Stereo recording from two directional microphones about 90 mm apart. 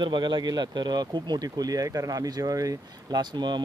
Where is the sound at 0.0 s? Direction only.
60° right (ahead or behind).